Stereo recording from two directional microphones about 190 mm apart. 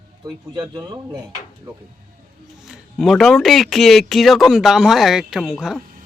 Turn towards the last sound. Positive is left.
turn(degrees=0)  # may be behind; listen again after turning